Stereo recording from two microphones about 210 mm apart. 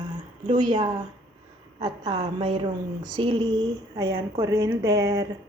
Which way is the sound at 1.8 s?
20° right (ahead or behind).